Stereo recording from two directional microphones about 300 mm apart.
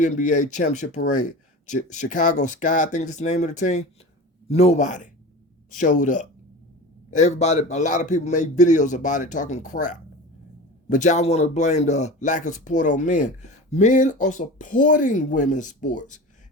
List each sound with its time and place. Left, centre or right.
0.0 s speech: left